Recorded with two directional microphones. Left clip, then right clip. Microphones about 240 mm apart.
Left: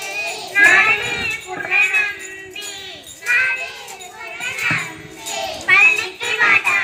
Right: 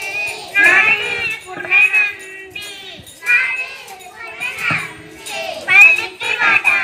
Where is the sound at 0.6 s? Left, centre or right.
Right.